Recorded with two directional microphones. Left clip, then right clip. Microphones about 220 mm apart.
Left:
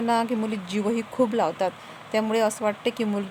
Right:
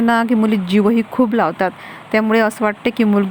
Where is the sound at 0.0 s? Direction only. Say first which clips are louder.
Right 8 dB; 15° right (ahead or behind).